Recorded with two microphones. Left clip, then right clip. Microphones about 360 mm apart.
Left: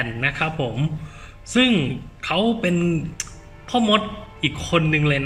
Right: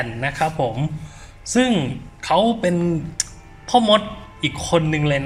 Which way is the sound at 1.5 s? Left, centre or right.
Centre.